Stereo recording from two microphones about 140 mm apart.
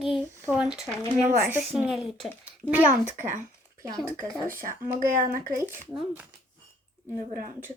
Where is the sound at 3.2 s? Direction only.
65° right (ahead or behind).